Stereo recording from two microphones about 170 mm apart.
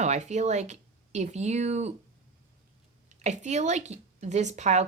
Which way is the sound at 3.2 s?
45° right (ahead or behind).